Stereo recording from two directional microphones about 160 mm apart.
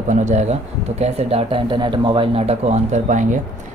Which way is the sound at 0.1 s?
50° right (ahead or behind).